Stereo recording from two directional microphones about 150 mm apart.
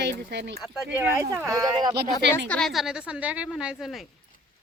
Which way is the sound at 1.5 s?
25° right (ahead or behind).